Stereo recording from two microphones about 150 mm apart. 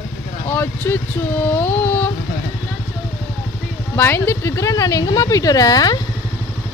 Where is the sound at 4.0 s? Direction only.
15° left (ahead or behind).